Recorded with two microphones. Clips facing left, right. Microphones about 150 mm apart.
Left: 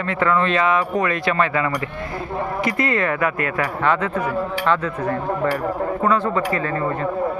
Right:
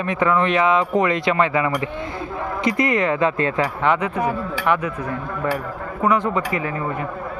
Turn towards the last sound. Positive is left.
turn(degrees=-15)  # may be behind; listen again after turning